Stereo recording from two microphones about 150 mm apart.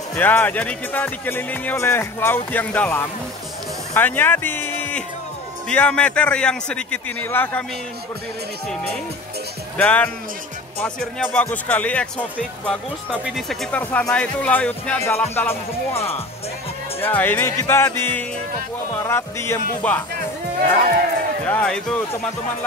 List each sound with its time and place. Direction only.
0.1 s speech: 10° left (ahead or behind)
9.8 s speech: 10° left (ahead or behind)
11.3 s speech: 10° left (ahead or behind)
13.1 s speech: 5° right (ahead or behind); by 20.0 s 15° left (ahead or behind)
21.5 s speech: 10° left (ahead or behind)